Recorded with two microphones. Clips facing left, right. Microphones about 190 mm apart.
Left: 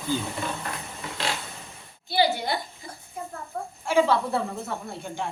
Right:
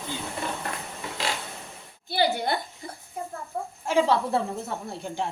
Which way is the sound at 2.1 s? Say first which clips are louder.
Left 1 dB; 50° right (ahead or behind).